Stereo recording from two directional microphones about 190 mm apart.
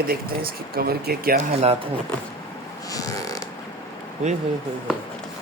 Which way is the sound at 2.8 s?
20° left (ahead or behind).